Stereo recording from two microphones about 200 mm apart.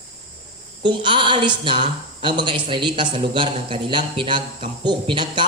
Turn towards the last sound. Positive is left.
turn(degrees=-25)  # may be behind; listen again after turning